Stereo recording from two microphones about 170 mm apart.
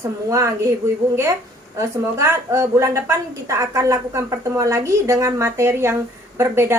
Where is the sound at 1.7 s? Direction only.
15° right (ahead or behind).